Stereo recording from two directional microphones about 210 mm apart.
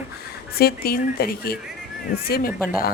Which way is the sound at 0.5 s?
45° left (ahead or behind).